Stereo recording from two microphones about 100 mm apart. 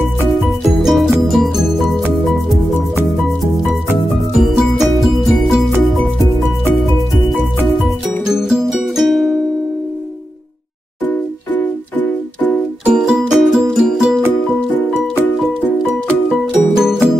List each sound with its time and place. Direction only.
0.3 s music: centre (ahead or behind)
4.4 s music: centre (ahead or behind)
7.8 s music: 5° right (ahead or behind)
11.5 s music: 15° left (ahead or behind)
12.8 s music: 5° right (ahead or behind)
16.7 s music: 5° right (ahead or behind)